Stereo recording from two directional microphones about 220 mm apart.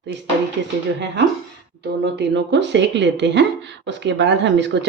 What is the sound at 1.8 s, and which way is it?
Speech, 50° right (ahead or behind).